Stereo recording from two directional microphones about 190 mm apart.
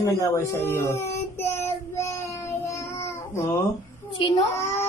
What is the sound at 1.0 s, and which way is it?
Child singing, 15° left (ahead or behind).